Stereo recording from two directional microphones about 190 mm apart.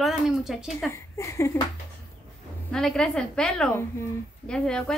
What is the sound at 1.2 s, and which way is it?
Speech, 15° left (ahead or behind).